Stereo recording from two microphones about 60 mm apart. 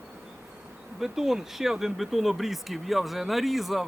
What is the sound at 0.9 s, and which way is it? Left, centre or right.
Speech, centre.